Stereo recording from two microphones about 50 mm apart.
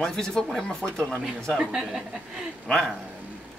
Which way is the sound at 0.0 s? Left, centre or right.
Centre.